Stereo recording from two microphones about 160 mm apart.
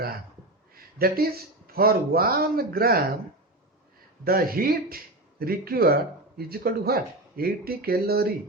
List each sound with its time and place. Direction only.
0.7 s speech: 70° right (ahead or behind)
4.2 s speech: 70° right (ahead or behind)